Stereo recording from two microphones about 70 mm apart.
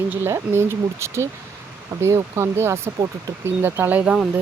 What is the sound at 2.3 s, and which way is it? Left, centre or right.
Speech, right.